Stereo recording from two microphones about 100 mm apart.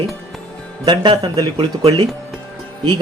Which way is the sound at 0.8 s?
50° right (ahead or behind).